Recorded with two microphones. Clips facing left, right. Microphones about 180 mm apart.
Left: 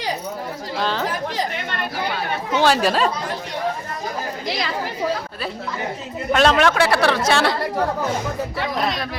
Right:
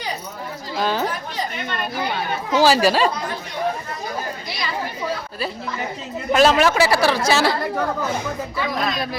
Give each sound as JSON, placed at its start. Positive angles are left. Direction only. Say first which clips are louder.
{"t": 0.8, "sound": "a woman's voice", "louder": "right 2 dB", "side_deg": -10}
{"t": 2.6, "sound": "speech", "louder": "right 2 dB", "side_deg": -5}
{"t": 4.4, "sound": "speech", "louder": "left 4 dB", "side_deg": 90}
{"t": 6.3, "sound": "speech", "louder": "right 1 dB", "side_deg": -5}